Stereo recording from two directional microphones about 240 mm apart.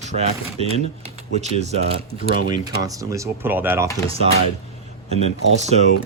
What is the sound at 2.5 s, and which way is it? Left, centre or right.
Speech, centre.